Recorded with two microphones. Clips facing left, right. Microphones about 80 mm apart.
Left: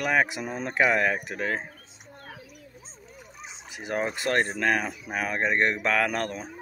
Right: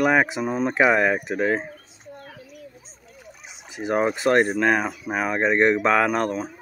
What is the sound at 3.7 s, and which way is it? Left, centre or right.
Speech, right.